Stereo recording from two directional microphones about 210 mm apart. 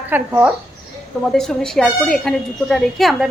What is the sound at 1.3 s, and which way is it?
A woman's voice, 5° left (ahead or behind).